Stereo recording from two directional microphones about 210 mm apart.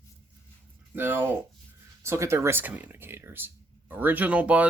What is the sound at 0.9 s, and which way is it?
Speech, 10° right (ahead or behind).